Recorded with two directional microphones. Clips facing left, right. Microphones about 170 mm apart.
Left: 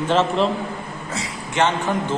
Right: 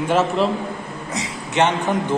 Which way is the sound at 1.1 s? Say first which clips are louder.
Right 3 dB; 20° right (ahead or behind).